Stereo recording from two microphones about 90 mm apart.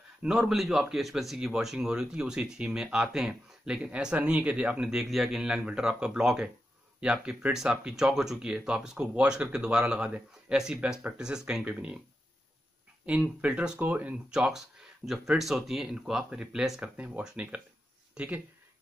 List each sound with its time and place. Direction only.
0.2 s speech: 5° right (ahead or behind)
13.0 s speech: 15° right (ahead or behind)
16.8 s speech: 20° right (ahead or behind)